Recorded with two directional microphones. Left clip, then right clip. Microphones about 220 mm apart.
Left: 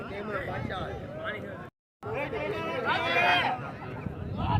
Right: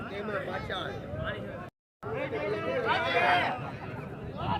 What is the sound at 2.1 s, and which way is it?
Chatter, 55° left (ahead or behind).